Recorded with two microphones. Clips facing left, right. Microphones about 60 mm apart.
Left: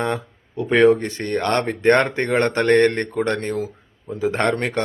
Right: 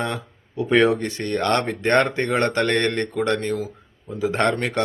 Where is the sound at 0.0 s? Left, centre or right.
Left.